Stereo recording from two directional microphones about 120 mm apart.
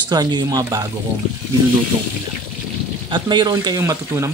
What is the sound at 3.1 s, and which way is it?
Speech, 35° right (ahead or behind).